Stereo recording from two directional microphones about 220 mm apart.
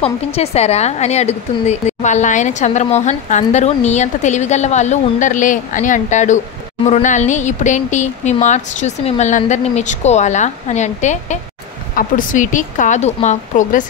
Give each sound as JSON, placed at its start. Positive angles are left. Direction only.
{"t": 0.0, "sound": "a woman's voice", "side_deg": 25}